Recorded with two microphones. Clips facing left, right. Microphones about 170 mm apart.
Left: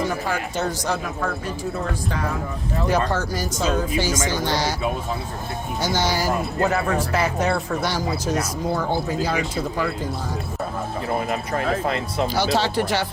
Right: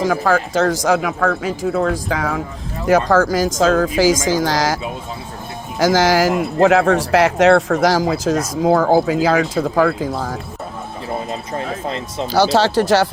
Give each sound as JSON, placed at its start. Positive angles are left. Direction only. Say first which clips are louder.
{"t": 0.3, "sound": "speech", "louder": "right 9 dB", "side_deg": -90}
{"t": 5.8, "sound": "speech", "louder": "right 9 dB", "side_deg": -90}
{"t": 11.3, "sound": "speech", "louder": "left 1 dB", "side_deg": -25}
{"t": 12.5, "sound": "speech", "louder": "right 7 dB", "side_deg": -90}